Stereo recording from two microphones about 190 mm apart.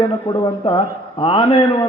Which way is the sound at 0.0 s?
25° left (ahead or behind).